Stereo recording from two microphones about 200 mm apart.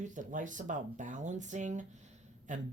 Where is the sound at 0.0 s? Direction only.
40° right (ahead or behind).